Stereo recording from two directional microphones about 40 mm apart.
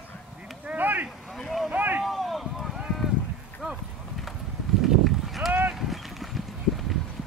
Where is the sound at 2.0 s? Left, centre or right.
Centre.